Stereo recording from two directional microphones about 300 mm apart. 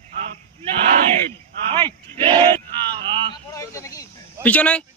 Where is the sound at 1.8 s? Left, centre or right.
Centre.